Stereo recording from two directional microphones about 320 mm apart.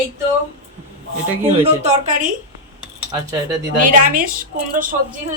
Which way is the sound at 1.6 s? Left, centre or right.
Right.